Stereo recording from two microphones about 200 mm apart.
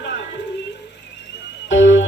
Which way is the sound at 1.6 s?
65° left (ahead or behind).